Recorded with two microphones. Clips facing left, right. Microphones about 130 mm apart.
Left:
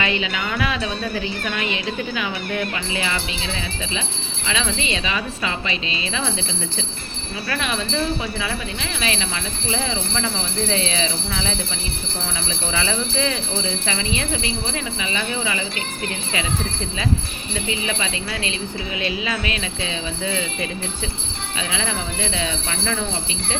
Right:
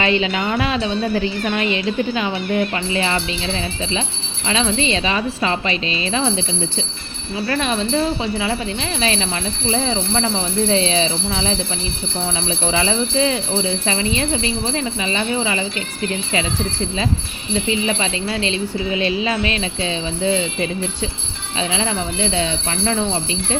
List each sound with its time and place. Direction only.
0.0 s speech: 35° right (ahead or behind)
4.4 s speech: 35° right (ahead or behind)
17.5 s speech: 30° right (ahead or behind)
21.7 s speech: 30° right (ahead or behind)